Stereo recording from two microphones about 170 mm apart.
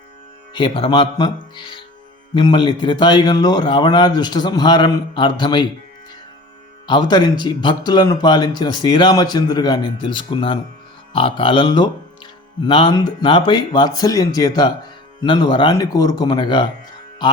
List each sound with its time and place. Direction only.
0.5 s speech: 30° left (ahead or behind)
6.8 s speech: 25° left (ahead or behind)
17.2 s music: 25° left (ahead or behind)